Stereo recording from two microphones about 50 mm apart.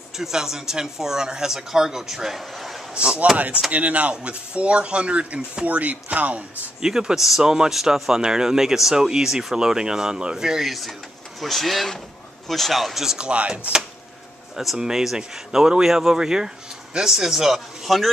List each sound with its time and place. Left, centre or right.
0.2 s speech: centre
2.9 s speech: centre
6.8 s speech: centre
13.3 s speech: right
14.8 s speech: centre